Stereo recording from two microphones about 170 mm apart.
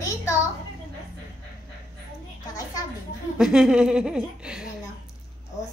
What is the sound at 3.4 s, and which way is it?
Speech, 5° right (ahead or behind).